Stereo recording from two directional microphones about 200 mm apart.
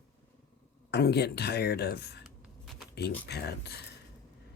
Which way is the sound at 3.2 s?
55° left (ahead or behind).